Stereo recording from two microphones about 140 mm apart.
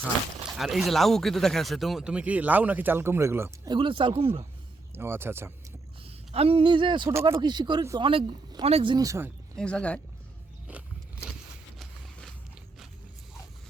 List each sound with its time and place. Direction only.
0.4 s speech: centre (ahead or behind); by 3.5 s 20° right (ahead or behind)
3.7 s speech: 35° right (ahead or behind)
4.9 s speech: 15° right (ahead or behind)
6.0 s a woman's voice: 45° right (ahead or behind)
9.0 s speech: 20° right (ahead or behind)
9.6 s speech: 5° left (ahead or behind)
10.7 s biting: 10° right (ahead or behind)